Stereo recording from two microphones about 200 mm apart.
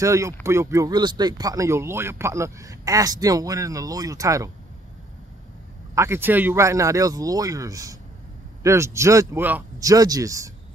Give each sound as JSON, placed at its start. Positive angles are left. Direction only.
{"t": 0.0, "sound": "speech", "side_deg": -15}
{"t": 5.9, "sound": "speech", "side_deg": -10}